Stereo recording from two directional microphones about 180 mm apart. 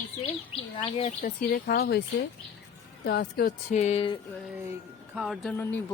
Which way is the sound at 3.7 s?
35° left (ahead or behind).